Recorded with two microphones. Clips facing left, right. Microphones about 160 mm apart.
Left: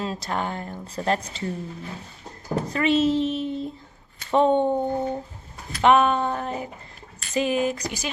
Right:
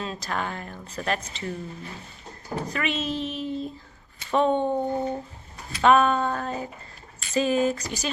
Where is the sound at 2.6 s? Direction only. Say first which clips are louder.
Left 9 dB; 30° left (ahead or behind).